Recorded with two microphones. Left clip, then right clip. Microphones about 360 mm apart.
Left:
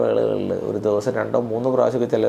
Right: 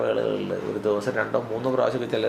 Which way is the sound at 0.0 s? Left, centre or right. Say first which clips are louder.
Left 5 dB; left.